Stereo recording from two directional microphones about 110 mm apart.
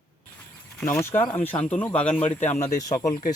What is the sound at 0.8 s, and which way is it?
Speech, 25° left (ahead or behind).